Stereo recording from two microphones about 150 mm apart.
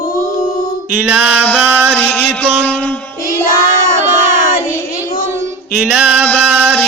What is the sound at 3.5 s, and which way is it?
Child singing, 70° left (ahead or behind).